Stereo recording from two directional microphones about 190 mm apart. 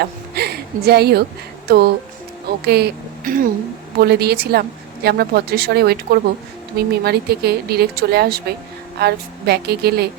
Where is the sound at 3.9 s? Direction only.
60° right (ahead or behind).